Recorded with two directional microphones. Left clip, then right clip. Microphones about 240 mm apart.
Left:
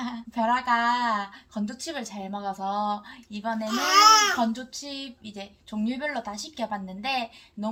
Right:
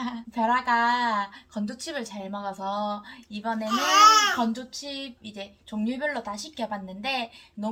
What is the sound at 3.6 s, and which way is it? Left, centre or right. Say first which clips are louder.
Speech: right 1 dB; centre.